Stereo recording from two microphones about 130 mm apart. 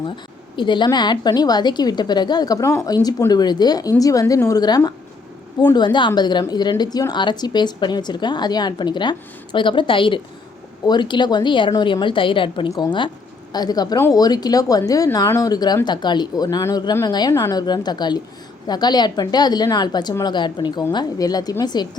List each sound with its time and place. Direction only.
0.5 s a woman's voice: 35° left (ahead or behind)